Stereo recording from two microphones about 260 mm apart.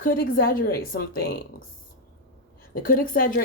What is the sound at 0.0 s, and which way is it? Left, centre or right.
Speech, left.